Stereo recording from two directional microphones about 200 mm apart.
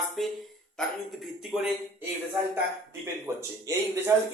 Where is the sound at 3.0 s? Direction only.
15° right (ahead or behind).